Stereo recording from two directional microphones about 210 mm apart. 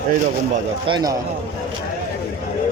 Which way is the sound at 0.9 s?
20° right (ahead or behind).